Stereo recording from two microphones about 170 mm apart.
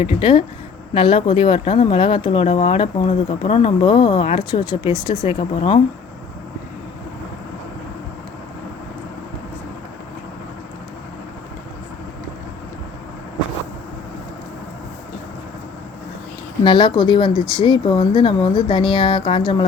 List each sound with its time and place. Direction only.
0.0 s speech: 30° left (ahead or behind)
16.6 s speech: 25° left (ahead or behind)